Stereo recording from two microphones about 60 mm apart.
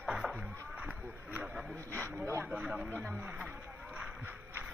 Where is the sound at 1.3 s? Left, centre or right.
Right.